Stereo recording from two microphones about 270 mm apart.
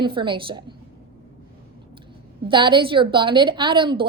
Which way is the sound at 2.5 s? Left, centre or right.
Centre.